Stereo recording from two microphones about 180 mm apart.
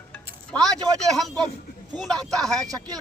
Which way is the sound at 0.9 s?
Centre (ahead or behind).